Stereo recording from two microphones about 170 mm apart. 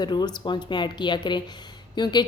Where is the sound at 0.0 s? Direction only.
25° left (ahead or behind).